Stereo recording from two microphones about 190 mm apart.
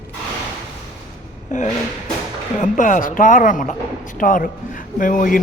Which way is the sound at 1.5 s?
40° left (ahead or behind).